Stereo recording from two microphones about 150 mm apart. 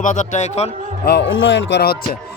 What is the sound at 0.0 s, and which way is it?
Speech, 55° left (ahead or behind).